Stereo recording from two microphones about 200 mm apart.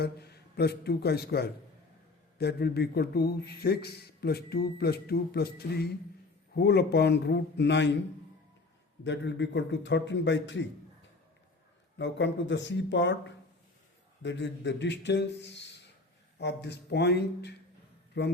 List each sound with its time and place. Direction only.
0.0 s a man's voice: 55° left (ahead or behind)
9.0 s a man's voice: 60° left (ahead or behind)
11.9 s a man's voice: 65° left (ahead or behind)